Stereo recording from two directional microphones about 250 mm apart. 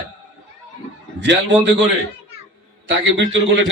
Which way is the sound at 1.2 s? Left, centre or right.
Right.